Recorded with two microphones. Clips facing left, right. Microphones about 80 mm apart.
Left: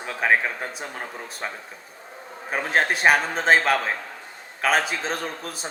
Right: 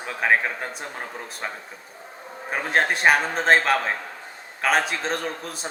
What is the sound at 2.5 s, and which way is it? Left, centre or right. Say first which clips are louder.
Speech: even; centre.